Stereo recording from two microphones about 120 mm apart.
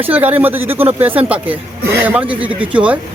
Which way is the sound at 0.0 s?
15° right (ahead or behind).